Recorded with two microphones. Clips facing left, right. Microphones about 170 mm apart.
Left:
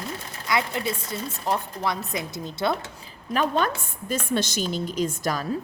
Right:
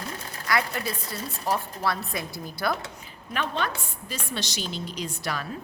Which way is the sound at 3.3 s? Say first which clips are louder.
Left 5 dB; 40° left (ahead or behind).